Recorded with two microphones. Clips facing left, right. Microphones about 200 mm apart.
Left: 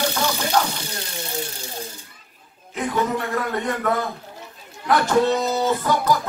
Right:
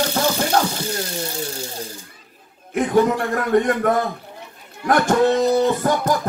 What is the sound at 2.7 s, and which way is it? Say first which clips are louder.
Music: right 6 dB; 50° right (ahead or behind).